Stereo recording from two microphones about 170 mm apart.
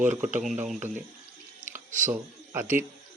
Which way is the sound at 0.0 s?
10° right (ahead or behind).